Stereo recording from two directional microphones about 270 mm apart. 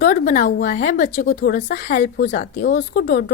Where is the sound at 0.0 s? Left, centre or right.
Left.